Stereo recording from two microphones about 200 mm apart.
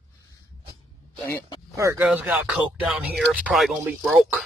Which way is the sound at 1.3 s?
20° left (ahead or behind).